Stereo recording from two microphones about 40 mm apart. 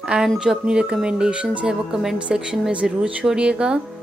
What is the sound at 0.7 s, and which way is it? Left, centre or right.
Speech, right.